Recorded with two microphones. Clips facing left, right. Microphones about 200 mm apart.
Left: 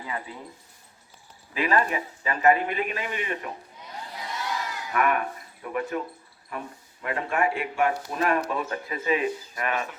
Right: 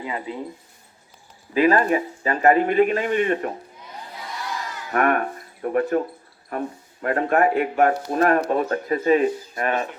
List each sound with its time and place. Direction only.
0.0 s speech: 20° right (ahead or behind)
1.5 s speech: 40° right (ahead or behind)
4.9 s speech: 45° right (ahead or behind)
7.0 s speech: 50° right (ahead or behind)